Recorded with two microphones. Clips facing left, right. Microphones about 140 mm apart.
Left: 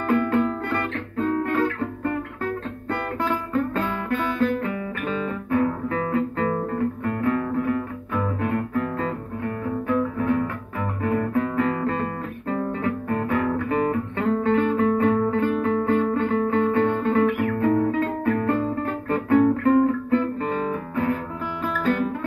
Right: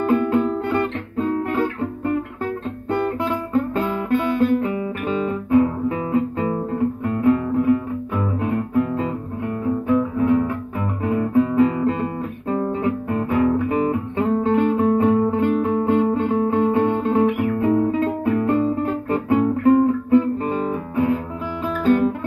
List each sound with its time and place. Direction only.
0.1 s music: 15° right (ahead or behind)
3.7 s music: 15° right (ahead or behind)
5.0 s guitar: 25° right (ahead or behind)